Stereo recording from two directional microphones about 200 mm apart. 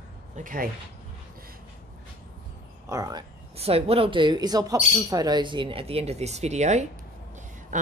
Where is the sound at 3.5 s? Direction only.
30° right (ahead or behind).